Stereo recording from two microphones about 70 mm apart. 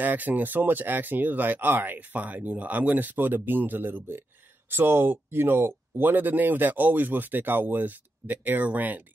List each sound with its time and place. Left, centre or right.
0.0 s speech: right